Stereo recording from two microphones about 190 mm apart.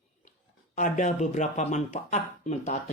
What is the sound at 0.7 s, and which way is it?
Speech, 40° left (ahead or behind).